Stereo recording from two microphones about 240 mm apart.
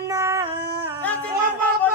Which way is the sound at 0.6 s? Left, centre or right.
Right.